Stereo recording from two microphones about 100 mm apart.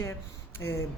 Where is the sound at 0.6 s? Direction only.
25° left (ahead or behind).